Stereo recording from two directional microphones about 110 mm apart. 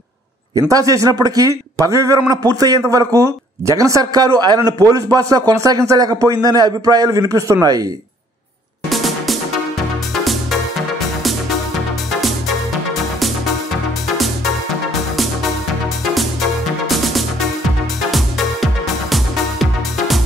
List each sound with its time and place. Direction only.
0.7 s a man's voice: 30° right (ahead or behind)
8.8 s music: centre (ahead or behind)
16.8 s music: centre (ahead or behind)